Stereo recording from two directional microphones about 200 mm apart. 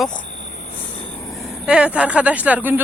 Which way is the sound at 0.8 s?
25° left (ahead or behind).